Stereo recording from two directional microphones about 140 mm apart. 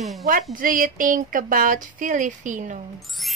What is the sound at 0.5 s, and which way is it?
A woman's voice, 75° right (ahead or behind).